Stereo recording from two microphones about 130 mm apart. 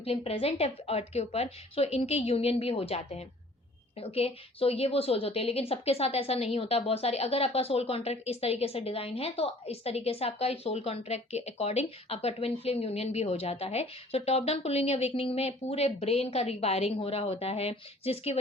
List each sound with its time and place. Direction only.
0.0 s a woman's voice: 50° left (ahead or behind)